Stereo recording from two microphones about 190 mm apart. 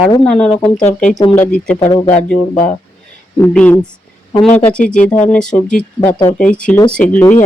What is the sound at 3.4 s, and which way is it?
Speech, 10° left (ahead or behind).